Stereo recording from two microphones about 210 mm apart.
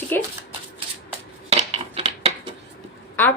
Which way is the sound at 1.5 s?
30° right (ahead or behind).